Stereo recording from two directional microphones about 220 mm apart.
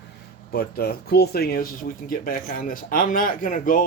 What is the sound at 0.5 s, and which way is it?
Speech, 45° left (ahead or behind).